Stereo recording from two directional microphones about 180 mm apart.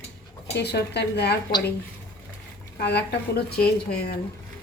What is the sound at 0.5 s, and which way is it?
Speech, 65° left (ahead or behind).